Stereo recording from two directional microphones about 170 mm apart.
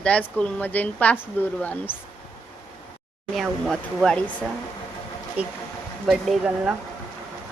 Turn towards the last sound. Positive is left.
turn(degrees=-5)  # may be behind; listen again after turning